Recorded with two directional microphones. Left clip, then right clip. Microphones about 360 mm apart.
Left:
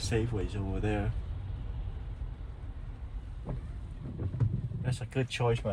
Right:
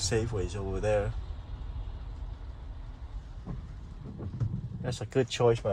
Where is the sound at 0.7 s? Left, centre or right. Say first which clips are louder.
Right 7 dB; centre.